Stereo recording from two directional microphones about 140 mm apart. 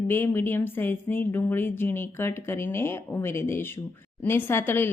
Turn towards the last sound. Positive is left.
turn(degrees=15)  # may be behind; listen again after turning